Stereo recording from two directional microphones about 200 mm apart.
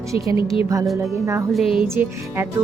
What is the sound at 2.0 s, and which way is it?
Speech, 10° right (ahead or behind).